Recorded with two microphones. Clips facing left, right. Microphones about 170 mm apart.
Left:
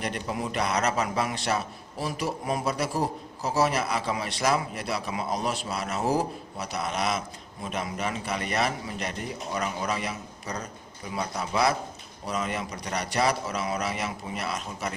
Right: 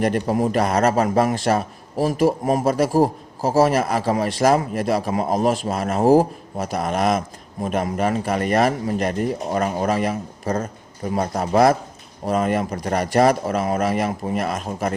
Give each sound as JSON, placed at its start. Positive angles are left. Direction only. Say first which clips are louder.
{"t": 0.0, "sound": "a man's voice", "louder": "right 11 dB", "side_deg": -45}